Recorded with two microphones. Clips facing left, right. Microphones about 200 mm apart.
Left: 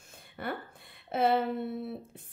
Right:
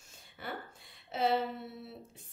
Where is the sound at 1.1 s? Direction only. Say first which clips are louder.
Left 4 dB; 55° left (ahead or behind).